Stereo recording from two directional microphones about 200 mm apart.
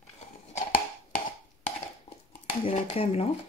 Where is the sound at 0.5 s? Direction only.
45° left (ahead or behind).